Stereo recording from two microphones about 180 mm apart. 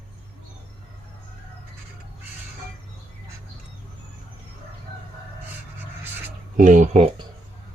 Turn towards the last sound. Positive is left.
turn(degrees=-40)  # may be behind; listen again after turning